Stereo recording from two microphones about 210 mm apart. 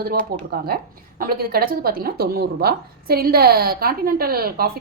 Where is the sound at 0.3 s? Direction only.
45° right (ahead or behind).